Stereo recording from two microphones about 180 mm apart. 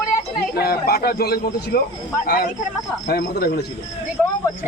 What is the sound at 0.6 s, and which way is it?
A man's voice, 60° left (ahead or behind).